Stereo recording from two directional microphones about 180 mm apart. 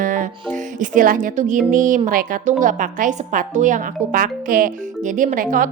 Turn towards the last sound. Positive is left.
turn(degrees=-50)  # may be behind; listen again after turning